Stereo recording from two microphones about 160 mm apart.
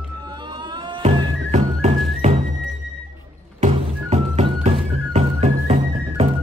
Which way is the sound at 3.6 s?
40° right (ahead or behind).